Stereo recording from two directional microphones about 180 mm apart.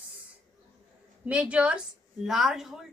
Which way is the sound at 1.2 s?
5° right (ahead or behind).